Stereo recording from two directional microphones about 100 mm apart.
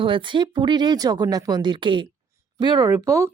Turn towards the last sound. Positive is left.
turn(degrees=-30)  # may be behind; listen again after turning